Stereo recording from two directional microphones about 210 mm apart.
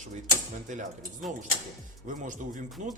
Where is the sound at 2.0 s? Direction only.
40° right (ahead or behind).